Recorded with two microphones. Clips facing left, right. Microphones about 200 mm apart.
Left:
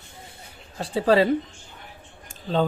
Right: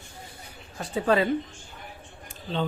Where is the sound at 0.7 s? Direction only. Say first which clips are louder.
Left 4 dB; 30° left (ahead or behind).